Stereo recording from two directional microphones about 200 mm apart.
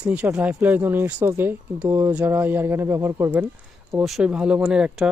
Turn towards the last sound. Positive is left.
turn(degrees=-5)  # may be behind; listen again after turning